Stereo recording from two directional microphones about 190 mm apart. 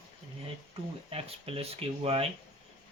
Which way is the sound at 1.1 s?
30° right (ahead or behind).